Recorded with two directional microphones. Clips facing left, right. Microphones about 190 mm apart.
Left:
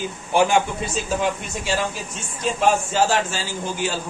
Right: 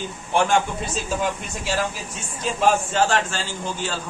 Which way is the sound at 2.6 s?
5° left (ahead or behind).